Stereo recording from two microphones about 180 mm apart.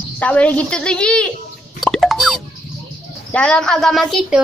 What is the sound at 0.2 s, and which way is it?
A woman's voice, 10° left (ahead or behind).